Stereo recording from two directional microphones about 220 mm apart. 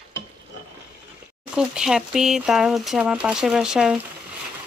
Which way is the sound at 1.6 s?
5° right (ahead or behind).